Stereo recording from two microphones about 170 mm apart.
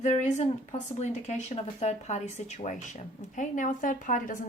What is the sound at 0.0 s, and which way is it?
A woman's voice, 45° left (ahead or behind).